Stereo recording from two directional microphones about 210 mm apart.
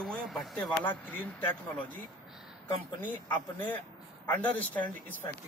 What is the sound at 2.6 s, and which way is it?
Speech, 10° left (ahead or behind).